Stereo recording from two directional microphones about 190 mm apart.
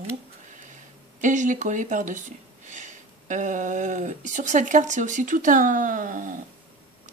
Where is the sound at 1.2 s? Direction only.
40° right (ahead or behind).